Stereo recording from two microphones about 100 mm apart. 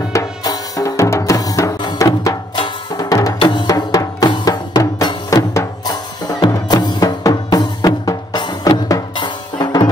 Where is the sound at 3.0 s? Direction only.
35° left (ahead or behind).